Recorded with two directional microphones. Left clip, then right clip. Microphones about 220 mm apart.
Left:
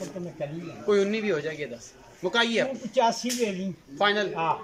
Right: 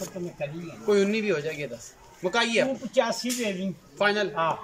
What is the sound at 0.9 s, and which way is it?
A man's voice, centre (ahead or behind).